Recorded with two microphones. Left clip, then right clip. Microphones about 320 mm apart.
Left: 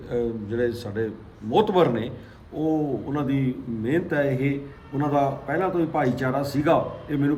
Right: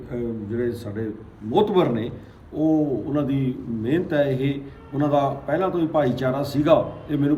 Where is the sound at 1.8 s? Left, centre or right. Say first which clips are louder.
Left 1 dB; centre.